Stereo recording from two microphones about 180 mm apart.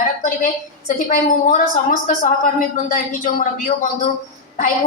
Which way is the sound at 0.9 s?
45° left (ahead or behind).